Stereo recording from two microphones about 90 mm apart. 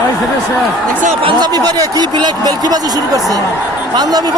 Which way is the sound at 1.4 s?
45° right (ahead or behind).